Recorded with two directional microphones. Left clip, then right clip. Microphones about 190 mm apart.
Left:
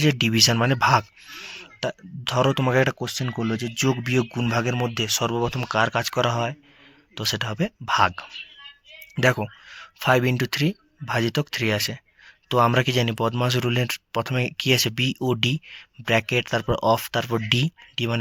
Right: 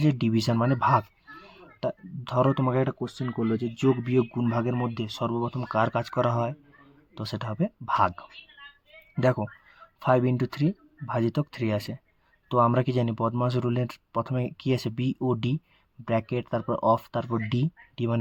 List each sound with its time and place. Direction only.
0.0 s speech: 5° left (ahead or behind)
2.9 s speech: 25° left (ahead or behind)
5.7 s speech: centre (ahead or behind)